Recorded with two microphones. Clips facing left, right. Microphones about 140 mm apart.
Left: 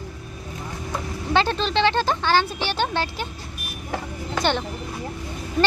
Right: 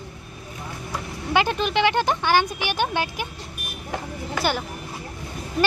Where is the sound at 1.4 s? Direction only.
15° right (ahead or behind).